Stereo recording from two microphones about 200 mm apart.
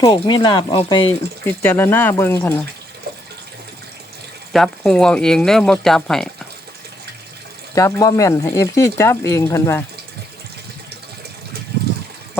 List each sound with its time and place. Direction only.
0.0 s speech: 20° left (ahead or behind)
1.5 s speech: 10° left (ahead or behind)
4.5 s speech: centre (ahead or behind)
7.8 s speech: 15° left (ahead or behind)